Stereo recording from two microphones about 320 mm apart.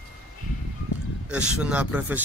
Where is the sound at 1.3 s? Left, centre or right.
Centre.